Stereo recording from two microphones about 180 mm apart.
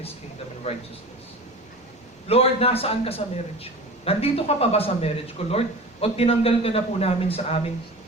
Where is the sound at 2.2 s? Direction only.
35° left (ahead or behind).